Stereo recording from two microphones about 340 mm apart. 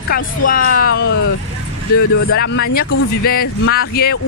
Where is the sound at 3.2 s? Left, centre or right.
Left.